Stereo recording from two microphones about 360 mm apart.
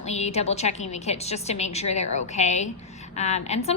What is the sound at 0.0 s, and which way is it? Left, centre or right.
A woman's voice, centre.